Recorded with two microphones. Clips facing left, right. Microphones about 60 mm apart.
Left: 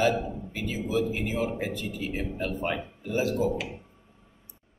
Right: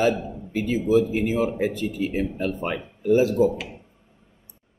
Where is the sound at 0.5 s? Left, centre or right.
Right.